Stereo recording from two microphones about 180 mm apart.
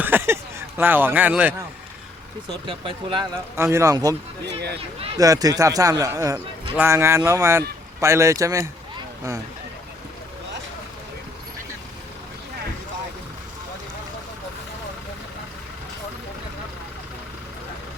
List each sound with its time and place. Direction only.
0.0 s a sound: 10° right (ahead or behind)
0.8 s speech: 10° right (ahead or behind)
2.6 s a man's voice: 30° right (ahead or behind)
3.5 s speech: 15° right (ahead or behind)
4.4 s speech: 65° right (ahead or behind)
5.1 s a man's voice: 20° right (ahead or behind)